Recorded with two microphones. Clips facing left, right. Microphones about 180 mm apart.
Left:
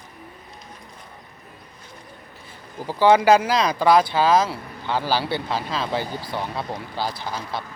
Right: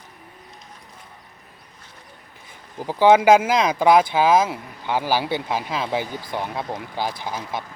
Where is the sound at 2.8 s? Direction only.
15° right (ahead or behind).